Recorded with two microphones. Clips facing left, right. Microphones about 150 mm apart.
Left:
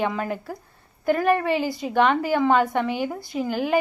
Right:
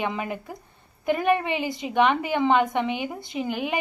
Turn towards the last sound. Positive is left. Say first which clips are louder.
# left 5 dB
turn(degrees=-15)  # may be behind; listen again after turning